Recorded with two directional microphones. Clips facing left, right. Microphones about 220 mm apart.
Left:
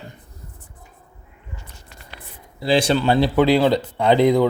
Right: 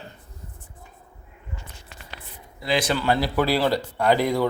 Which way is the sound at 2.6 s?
30° left (ahead or behind).